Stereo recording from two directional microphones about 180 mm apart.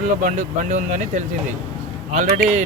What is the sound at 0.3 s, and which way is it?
Speech, 45° right (ahead or behind).